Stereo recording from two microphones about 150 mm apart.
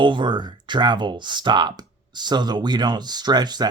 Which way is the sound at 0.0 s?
30° right (ahead or behind).